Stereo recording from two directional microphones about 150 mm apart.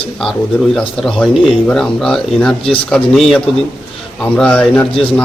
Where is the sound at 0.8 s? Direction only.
5° left (ahead or behind).